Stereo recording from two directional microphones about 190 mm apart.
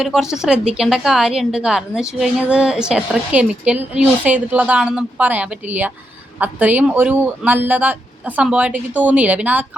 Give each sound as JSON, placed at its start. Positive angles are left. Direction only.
{"t": 0.0, "sound": "a woman's voice", "side_deg": 0}